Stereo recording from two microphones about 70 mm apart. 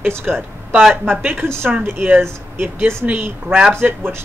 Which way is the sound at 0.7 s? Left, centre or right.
Centre.